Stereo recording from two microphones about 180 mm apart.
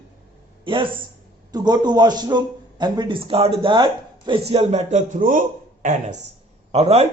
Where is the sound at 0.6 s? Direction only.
25° right (ahead or behind).